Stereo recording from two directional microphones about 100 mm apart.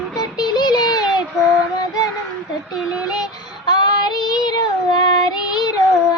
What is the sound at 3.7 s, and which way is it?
Child singing, 45° left (ahead or behind).